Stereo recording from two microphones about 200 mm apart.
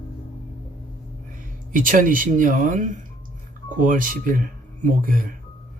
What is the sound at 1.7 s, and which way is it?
Speech, 40° right (ahead or behind).